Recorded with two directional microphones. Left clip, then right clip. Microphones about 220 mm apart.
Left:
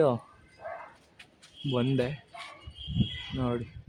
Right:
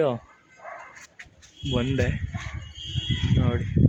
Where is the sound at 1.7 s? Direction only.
Centre (ahead or behind).